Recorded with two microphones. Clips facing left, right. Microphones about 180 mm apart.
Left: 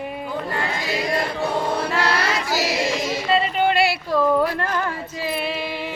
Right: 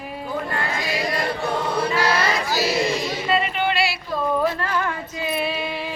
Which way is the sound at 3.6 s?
55° left (ahead or behind).